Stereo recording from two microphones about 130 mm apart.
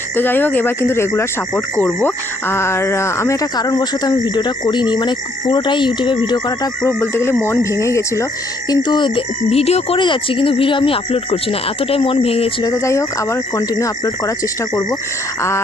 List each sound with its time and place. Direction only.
0.2 s speech: 15° left (ahead or behind); by 6.7 s 35° left (ahead or behind)
6.8 s speech: 20° left (ahead or behind)
8.7 s speech: 35° left (ahead or behind); by 10.0 s 50° left (ahead or behind)
10.0 s speech: 40° left (ahead or behind)
12.6 s speech: 25° left (ahead or behind)